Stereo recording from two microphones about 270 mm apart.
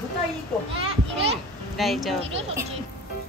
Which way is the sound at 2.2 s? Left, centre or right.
Right.